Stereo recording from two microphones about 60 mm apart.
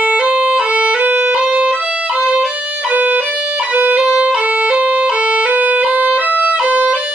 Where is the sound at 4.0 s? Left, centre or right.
Centre.